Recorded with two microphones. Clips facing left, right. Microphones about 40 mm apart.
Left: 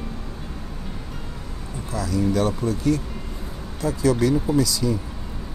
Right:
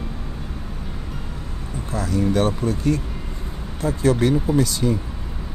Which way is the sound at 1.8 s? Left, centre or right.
Right.